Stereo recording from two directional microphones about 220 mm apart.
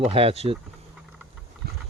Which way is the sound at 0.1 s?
25° right (ahead or behind).